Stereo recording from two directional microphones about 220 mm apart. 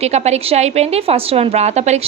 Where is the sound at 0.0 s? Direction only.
30° right (ahead or behind).